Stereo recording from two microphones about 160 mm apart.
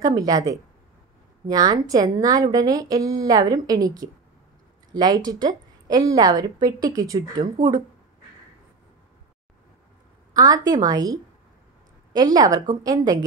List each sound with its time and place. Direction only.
0.0 s a woman's voice: 20° right (ahead or behind)
10.3 s a woman's voice: 25° right (ahead or behind)